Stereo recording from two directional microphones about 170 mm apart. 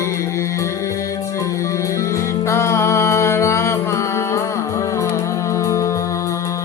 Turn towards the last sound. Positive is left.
turn(degrees=20)  # may be behind; listen again after turning